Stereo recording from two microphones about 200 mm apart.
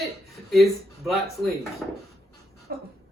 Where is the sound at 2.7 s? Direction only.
50° right (ahead or behind).